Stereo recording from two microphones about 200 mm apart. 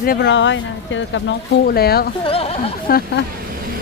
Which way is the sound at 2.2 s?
30° left (ahead or behind).